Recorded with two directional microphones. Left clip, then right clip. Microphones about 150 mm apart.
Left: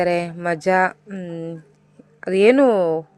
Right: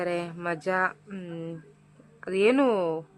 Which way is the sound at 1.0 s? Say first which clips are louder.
Left 8 dB; 30° left (ahead or behind).